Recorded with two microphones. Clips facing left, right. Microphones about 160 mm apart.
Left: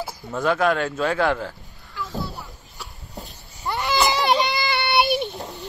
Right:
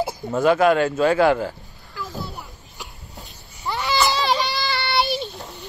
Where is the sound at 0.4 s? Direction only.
5° right (ahead or behind).